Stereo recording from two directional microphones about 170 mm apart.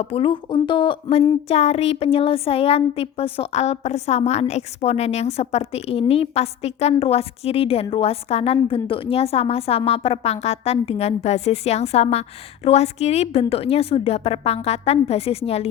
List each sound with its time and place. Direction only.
0.0 s speech: 35° left (ahead or behind)
1.5 s speech: 35° left (ahead or behind)